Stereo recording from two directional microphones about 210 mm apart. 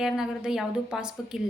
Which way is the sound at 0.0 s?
Centre (ahead or behind).